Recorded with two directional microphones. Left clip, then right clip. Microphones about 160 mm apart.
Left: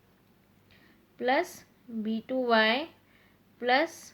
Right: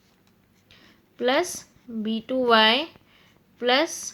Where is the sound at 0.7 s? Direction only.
30° right (ahead or behind).